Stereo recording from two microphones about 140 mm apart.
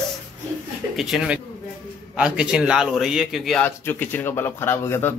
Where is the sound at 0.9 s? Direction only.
Centre (ahead or behind).